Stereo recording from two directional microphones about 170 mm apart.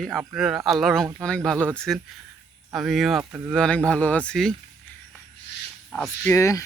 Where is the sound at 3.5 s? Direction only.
5° left (ahead or behind).